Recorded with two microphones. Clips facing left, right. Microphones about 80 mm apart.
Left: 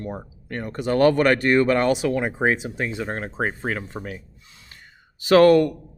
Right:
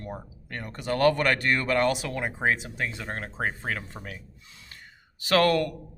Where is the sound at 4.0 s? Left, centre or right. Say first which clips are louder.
Left 7 dB; left.